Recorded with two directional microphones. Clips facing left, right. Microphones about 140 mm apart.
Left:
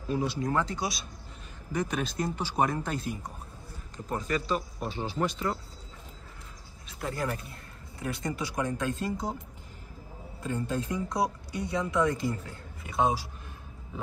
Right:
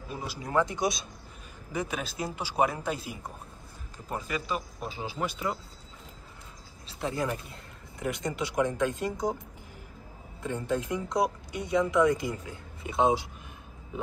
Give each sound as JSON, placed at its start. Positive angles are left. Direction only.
{"t": 0.1, "sound": "speech", "side_deg": -5}
{"t": 0.5, "sound": "speech", "side_deg": -20}
{"t": 1.7, "sound": "speech", "side_deg": -5}
{"t": 6.9, "sound": "speech", "side_deg": -20}
{"t": 10.4, "sound": "speech", "side_deg": -20}